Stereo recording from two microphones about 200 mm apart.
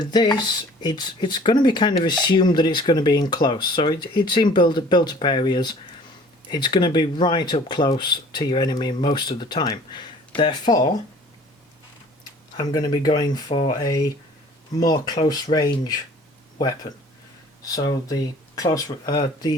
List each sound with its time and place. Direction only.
0.0 s speech: 20° left (ahead or behind)
12.5 s speech: 20° left (ahead or behind)
17.6 s speech: 20° left (ahead or behind)